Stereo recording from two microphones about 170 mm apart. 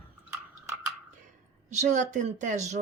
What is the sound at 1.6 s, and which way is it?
Speech, 45° right (ahead or behind).